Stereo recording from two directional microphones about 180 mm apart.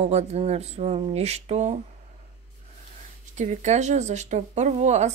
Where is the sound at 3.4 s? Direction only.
40° right (ahead or behind).